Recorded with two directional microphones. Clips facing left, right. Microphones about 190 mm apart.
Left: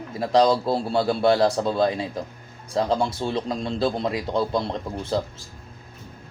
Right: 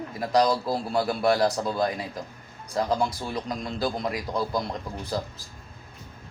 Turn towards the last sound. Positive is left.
turn(degrees=25)  # may be behind; listen again after turning